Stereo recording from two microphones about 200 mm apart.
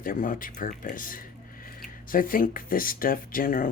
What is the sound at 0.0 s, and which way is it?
Speech, 45° left (ahead or behind).